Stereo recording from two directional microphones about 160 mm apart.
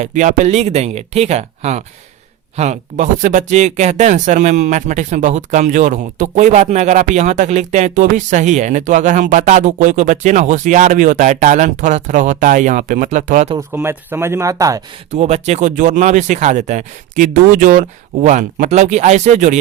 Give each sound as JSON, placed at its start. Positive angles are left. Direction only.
{"t": 0.0, "sound": "speech", "side_deg": -55}
{"t": 13.6, "sound": "speech", "side_deg": -15}
{"t": 15.1, "sound": "speech", "side_deg": -45}